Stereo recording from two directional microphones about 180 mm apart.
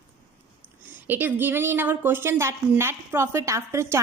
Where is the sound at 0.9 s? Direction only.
10° right (ahead or behind).